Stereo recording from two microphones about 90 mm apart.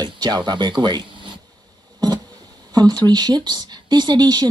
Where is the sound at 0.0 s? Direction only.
55° right (ahead or behind).